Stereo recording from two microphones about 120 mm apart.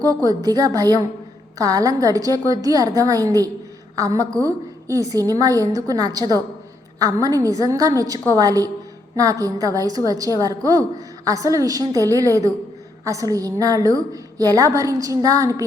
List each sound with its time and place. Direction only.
0.0 s a woman's voice: 30° right (ahead or behind)